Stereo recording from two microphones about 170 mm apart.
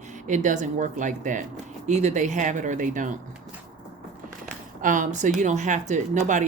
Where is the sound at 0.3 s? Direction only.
45° right (ahead or behind).